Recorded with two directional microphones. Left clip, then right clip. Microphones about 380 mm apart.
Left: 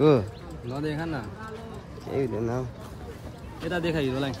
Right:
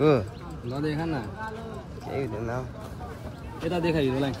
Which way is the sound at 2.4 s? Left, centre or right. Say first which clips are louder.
Left 2 dB; centre.